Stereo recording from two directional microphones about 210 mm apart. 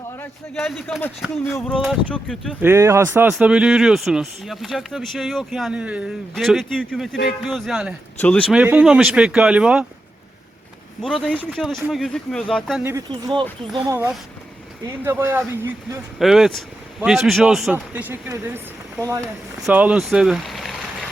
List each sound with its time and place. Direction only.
0.2 s speech: 5° left (ahead or behind)
1.5 s a sound: 5° left (ahead or behind)
1.8 s speech: centre (ahead or behind)
2.6 s speech: 10° right (ahead or behind)
11.0 s speech: 5° left (ahead or behind)
12.8 s speech: 15° right (ahead or behind); by 21.1 s centre (ahead or behind)